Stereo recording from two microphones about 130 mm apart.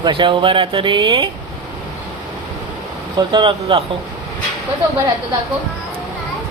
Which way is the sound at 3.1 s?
35° right (ahead or behind).